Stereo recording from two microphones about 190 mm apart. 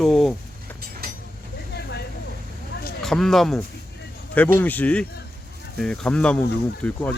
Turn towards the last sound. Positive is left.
turn(degrees=5)  # may be behind; listen again after turning